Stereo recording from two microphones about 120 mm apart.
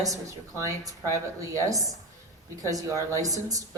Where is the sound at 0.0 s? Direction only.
25° right (ahead or behind).